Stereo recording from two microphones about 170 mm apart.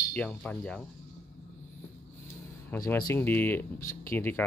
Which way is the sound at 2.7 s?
15° left (ahead or behind).